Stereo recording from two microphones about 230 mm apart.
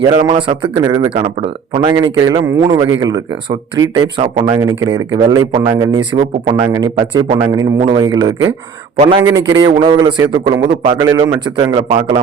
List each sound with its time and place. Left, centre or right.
0.1 s a man's voice: right
11.8 s a man's voice: right